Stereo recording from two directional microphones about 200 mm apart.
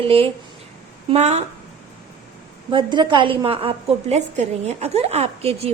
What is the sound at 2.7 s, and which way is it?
A woman's voice, 25° right (ahead or behind).